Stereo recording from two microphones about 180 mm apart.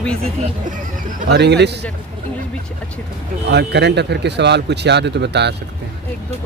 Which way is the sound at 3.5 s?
70° right (ahead or behind).